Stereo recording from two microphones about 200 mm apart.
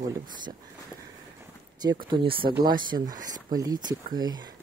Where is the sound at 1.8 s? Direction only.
25° right (ahead or behind).